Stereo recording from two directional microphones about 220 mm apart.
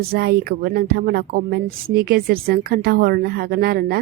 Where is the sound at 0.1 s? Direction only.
45° right (ahead or behind).